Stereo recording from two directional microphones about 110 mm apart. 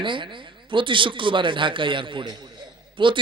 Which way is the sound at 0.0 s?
50° right (ahead or behind).